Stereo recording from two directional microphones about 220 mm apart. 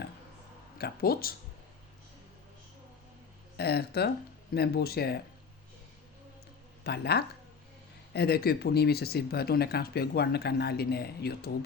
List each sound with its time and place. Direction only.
0.8 s speech: 45° left (ahead or behind)
3.6 s speech: 45° left (ahead or behind)
6.8 s speech: 50° left (ahead or behind)